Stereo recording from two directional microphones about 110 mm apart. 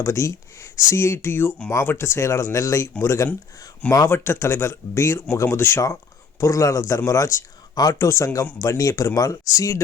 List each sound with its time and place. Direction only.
0.0 s speech: 25° left (ahead or behind)